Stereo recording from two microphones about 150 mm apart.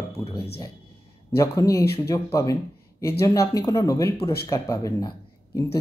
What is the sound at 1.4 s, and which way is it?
Speech, 20° left (ahead or behind).